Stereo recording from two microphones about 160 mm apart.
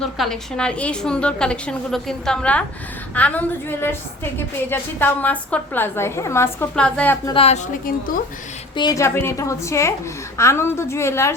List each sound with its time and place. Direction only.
0.0 s a woman's voice: 5° left (ahead or behind)
7.3 s a woman's voice: 35° left (ahead or behind)
7.7 s a woman's voice: 60° left (ahead or behind)
8.7 s a woman's voice: 25° left (ahead or behind)